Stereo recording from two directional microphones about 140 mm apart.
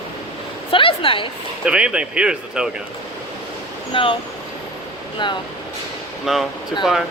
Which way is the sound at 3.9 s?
40° left (ahead or behind).